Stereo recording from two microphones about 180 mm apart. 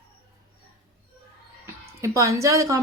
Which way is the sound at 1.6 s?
15° right (ahead or behind).